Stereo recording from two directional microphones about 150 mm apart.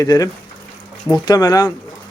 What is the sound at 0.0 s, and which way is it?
Speech, 25° left (ahead or behind).